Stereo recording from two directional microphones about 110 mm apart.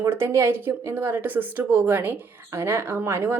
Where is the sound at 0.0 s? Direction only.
25° right (ahead or behind).